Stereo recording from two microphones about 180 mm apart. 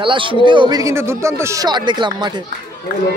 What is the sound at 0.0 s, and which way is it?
Speech, 30° right (ahead or behind).